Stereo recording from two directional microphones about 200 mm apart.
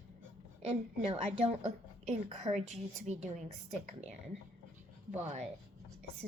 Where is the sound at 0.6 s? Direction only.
30° right (ahead or behind).